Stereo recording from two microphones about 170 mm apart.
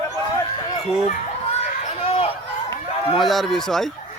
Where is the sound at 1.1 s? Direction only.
40° left (ahead or behind).